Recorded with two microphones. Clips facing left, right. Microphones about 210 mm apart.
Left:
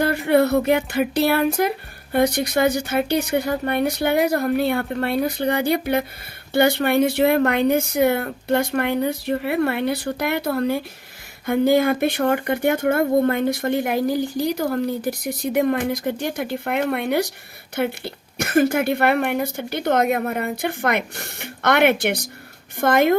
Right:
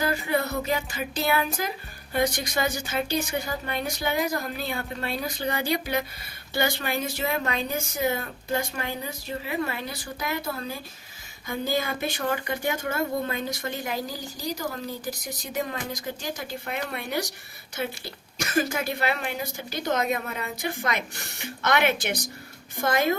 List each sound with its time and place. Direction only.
0.3 s speech: 65° left (ahead or behind)